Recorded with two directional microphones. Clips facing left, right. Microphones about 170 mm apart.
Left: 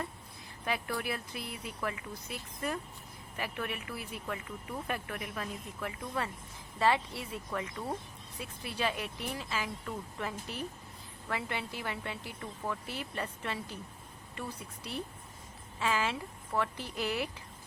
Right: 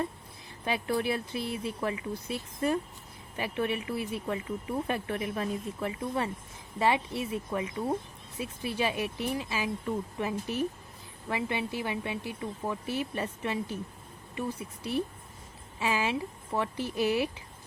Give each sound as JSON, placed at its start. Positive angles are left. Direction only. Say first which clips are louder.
{"t": 0.6, "sound": "speech", "louder": "right 6 dB", "side_deg": -25}
{"t": 15.8, "sound": "speech", "louder": "right 3 dB", "side_deg": -15}